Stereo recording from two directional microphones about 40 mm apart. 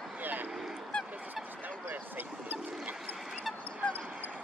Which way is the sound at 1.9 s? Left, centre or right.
Right.